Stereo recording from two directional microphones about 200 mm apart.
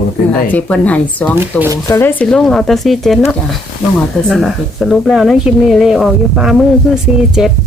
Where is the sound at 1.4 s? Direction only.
10° right (ahead or behind).